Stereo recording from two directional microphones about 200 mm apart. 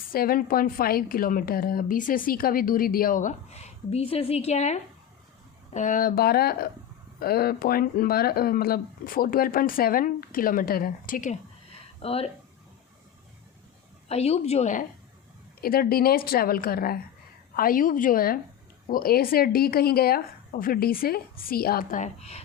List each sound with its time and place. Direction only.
0.1 s a woman's voice: 45° left (ahead or behind)
11.9 s speech: 30° left (ahead or behind)
14.1 s a woman's voice: 30° left (ahead or behind)
15.6 s speech: 50° left (ahead or behind)